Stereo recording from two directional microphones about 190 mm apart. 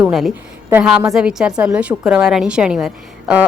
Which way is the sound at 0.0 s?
Centre (ahead or behind).